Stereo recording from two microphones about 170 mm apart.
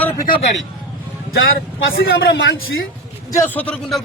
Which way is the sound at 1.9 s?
80° left.